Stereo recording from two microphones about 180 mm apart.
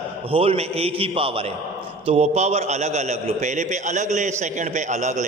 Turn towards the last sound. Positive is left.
turn(degrees=-40)  # may be behind; listen again after turning